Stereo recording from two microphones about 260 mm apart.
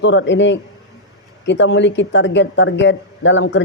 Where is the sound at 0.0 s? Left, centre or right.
Left.